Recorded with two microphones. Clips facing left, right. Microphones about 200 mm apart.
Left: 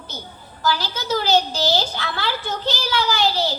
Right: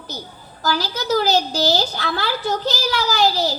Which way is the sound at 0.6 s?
40° right (ahead or behind).